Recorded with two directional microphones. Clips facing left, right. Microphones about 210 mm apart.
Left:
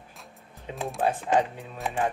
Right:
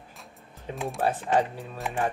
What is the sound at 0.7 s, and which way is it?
Speech, centre (ahead or behind).